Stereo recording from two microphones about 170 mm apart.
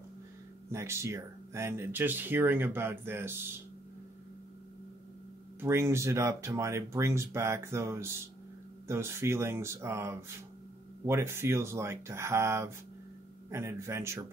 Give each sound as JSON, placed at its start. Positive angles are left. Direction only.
{"t": 0.7, "sound": "speech", "side_deg": -15}
{"t": 5.6, "sound": "speech", "side_deg": -15}